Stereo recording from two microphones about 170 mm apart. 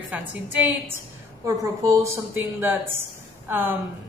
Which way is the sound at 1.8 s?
15° right (ahead or behind).